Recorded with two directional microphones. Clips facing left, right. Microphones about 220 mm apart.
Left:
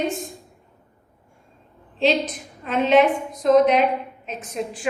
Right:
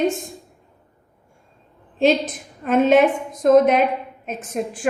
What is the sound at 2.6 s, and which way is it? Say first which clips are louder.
A woman's voice: right 2 dB; 50° right (ahead or behind).